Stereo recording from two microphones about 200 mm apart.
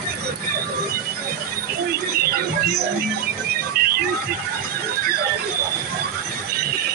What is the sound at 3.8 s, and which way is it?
Music, 50° right (ahead or behind).